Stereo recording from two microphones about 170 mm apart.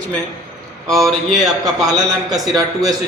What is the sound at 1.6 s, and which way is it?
A man's voice, 20° right (ahead or behind).